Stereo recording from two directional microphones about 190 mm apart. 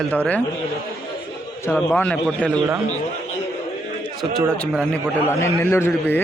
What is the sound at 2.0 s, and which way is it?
Speech, 5° left (ahead or behind).